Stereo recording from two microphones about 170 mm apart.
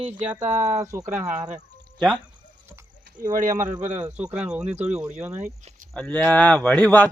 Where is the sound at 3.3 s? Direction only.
50° right (ahead or behind).